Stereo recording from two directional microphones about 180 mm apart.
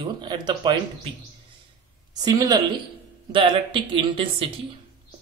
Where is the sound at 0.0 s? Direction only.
25° right (ahead or behind).